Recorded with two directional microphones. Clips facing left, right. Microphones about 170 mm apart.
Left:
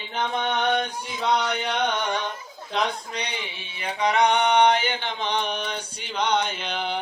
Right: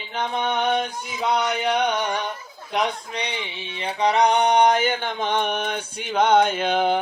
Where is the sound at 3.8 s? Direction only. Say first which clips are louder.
Right 2 dB; 35° right (ahead or behind).